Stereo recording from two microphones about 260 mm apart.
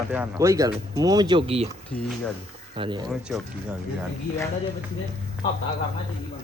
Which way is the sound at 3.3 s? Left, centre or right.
Centre.